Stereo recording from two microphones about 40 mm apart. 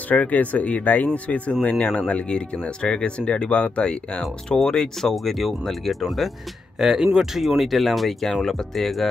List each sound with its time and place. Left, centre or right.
0.1 s speech: left
2.2 s speech: left
3.8 s speech: left
4.6 s speech: centre
5.1 s speech: centre
6.8 s speech: centre